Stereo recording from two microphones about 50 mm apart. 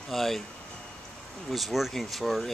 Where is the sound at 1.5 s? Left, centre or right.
Centre.